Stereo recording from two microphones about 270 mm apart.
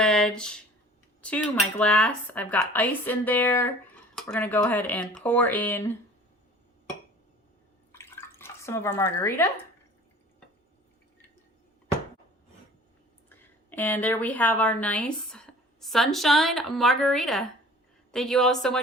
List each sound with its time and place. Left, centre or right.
0.0 s a sound: centre
1.8 s a woman's voice: centre
7.9 s drip: centre
13.3 s a woman's voice: centre